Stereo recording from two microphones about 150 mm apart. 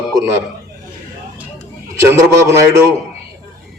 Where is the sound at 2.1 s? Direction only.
20° right (ahead or behind).